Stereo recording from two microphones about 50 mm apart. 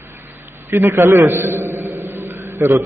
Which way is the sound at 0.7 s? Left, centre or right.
Right.